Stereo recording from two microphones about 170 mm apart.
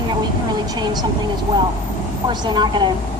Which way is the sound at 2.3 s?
25° right (ahead or behind).